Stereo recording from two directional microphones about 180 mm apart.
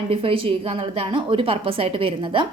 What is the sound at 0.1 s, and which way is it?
A woman's voice, 30° right (ahead or behind).